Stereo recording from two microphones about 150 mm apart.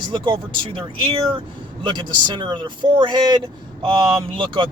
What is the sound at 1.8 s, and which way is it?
Speech, 30° right (ahead or behind).